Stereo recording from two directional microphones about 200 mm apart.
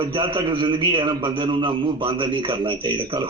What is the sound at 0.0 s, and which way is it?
A man's voice, 25° right (ahead or behind).